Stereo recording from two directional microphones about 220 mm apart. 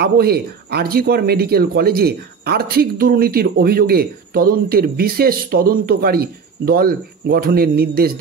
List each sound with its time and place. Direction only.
0.0 s speech: 45° right (ahead or behind)